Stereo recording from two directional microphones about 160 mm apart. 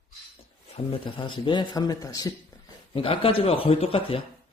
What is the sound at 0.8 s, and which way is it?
A man's voice, 30° left (ahead or behind).